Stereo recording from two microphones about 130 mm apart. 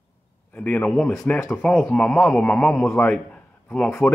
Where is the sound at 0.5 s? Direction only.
10° left (ahead or behind).